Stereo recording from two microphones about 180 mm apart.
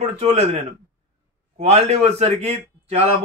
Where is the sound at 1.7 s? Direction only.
40° right (ahead or behind).